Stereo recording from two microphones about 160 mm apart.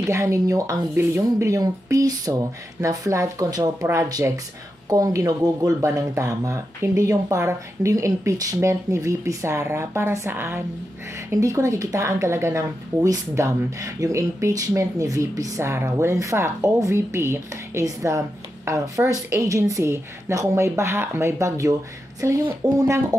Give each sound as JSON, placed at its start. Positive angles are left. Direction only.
{"t": 0.0, "sound": "speech", "side_deg": -20}